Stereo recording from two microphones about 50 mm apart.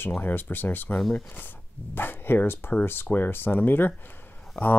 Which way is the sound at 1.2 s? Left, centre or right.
Left.